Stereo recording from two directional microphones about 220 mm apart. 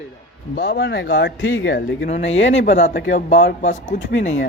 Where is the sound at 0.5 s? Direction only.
45° left (ahead or behind).